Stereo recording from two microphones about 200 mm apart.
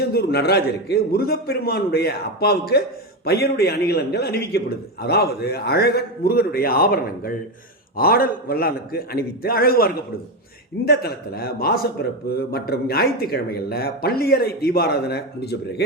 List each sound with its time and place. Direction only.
0.0 s a man's voice: 55° left (ahead or behind)